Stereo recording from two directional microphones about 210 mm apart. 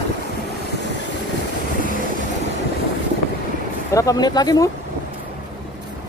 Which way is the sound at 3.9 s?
15° left (ahead or behind).